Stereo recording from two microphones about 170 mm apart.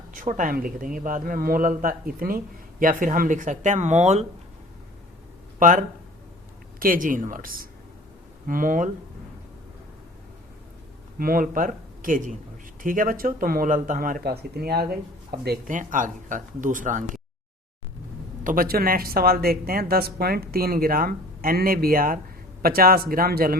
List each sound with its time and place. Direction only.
0.1 s speech: 50° right (ahead or behind)
5.5 s speech: 50° right (ahead or behind)
11.2 s speech: 55° right (ahead or behind)
18.4 s speech: 55° right (ahead or behind)